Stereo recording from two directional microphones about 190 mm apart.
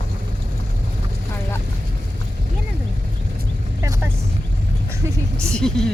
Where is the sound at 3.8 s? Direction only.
15° right (ahead or behind).